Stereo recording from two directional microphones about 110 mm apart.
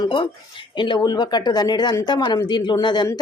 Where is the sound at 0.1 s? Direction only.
50° left (ahead or behind).